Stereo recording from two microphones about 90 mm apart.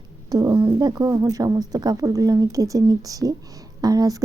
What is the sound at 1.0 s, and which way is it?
Speech, 40° right (ahead or behind).